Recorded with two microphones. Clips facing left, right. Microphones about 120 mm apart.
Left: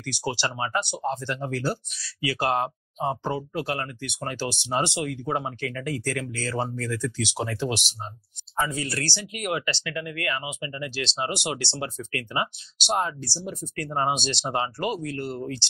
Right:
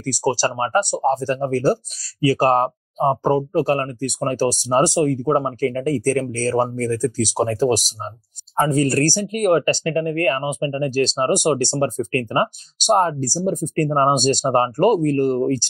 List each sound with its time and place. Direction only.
0.0 s speech: 40° right (ahead or behind)